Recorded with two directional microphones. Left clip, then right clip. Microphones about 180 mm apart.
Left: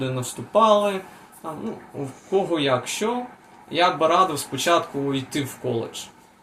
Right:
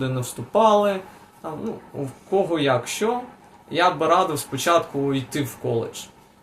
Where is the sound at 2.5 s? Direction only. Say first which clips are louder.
Right 1 dB; 25° right (ahead or behind).